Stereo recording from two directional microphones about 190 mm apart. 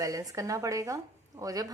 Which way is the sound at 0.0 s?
20° right (ahead or behind).